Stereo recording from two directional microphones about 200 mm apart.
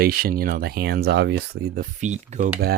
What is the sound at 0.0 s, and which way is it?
Speech, 50° right (ahead or behind).